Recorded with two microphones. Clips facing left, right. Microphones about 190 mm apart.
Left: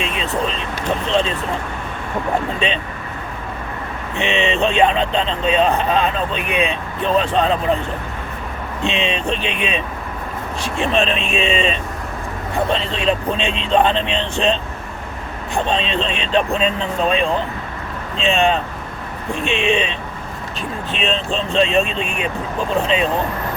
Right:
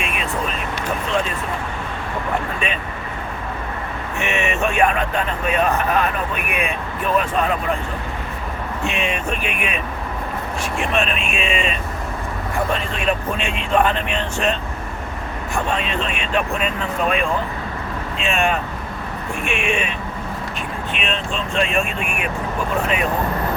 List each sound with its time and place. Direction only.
0.0 s vehicle: 25° left (ahead or behind)
1.1 s speech: 25° left (ahead or behind)
4.2 s speech: 20° left (ahead or behind)
8.8 s speech: 20° left (ahead or behind)
20.9 s speech: 30° left (ahead or behind)
21.6 s speech: 20° left (ahead or behind)